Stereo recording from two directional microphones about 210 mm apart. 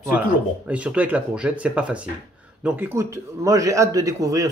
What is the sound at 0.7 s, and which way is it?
A man's voice, 5° right (ahead or behind).